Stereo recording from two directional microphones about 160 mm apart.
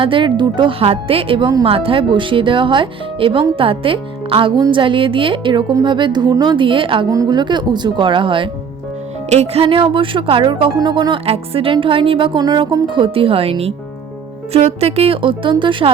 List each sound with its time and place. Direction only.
0.0 s speech: 30° right (ahead or behind)